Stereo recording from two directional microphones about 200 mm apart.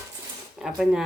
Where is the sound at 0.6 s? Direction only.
Centre (ahead or behind).